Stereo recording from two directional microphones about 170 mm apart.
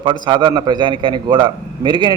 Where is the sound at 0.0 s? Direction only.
30° right (ahead or behind).